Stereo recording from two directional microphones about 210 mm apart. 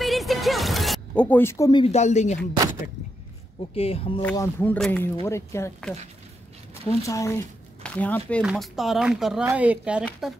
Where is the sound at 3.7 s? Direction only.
30° left (ahead or behind).